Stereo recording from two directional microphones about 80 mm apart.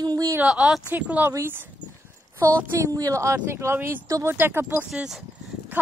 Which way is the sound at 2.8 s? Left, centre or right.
Right.